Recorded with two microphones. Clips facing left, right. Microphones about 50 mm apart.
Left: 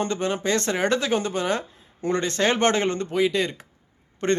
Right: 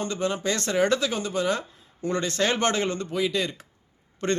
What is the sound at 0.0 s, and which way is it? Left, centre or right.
A man's voice, left.